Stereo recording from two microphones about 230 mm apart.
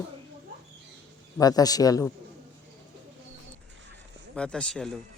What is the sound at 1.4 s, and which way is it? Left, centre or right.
Speech, centre.